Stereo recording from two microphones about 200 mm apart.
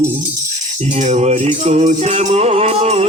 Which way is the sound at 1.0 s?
35° right (ahead or behind).